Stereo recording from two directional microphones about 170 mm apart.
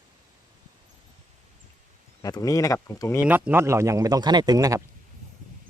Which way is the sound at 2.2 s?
20° left (ahead or behind).